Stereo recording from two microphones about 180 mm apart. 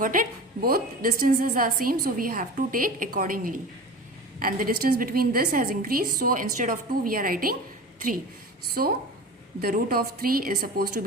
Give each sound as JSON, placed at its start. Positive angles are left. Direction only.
{"t": 0.0, "sound": "a woman's voice", "side_deg": -50}
{"t": 8.8, "sound": "a woman's voice", "side_deg": -50}